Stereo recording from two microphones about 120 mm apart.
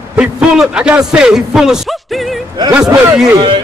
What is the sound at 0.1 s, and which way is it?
A man's voice, 10° right (ahead or behind).